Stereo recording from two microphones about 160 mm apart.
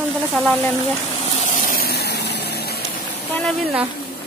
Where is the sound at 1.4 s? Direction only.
50° left (ahead or behind); by 2.8 s 80° left.